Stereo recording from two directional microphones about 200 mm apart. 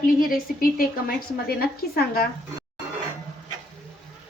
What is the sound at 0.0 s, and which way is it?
A woman's voice, 45° left (ahead or behind).